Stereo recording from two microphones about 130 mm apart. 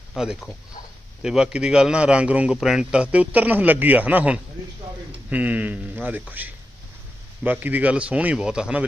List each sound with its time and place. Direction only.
0.2 s a man's voice: 5° right (ahead or behind)